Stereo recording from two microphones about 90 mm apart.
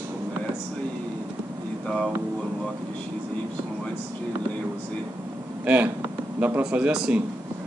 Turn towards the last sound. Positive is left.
turn(degrees=-15)  # may be behind; listen again after turning